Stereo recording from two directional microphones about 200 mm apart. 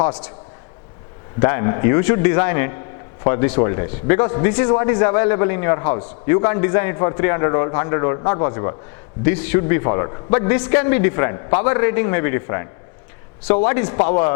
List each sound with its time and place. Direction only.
0.0 s a man's voice: 10° left (ahead or behind)
1.4 s a man's voice: 15° left (ahead or behind)